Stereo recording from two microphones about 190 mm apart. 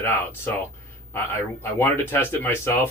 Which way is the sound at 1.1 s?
10° left (ahead or behind).